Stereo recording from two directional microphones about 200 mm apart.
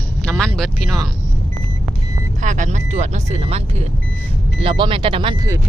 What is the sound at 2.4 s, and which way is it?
Speech, 40° right (ahead or behind).